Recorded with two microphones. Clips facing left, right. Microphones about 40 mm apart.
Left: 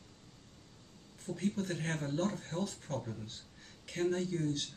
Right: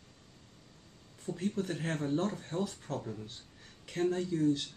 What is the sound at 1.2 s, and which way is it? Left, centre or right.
Speech, centre.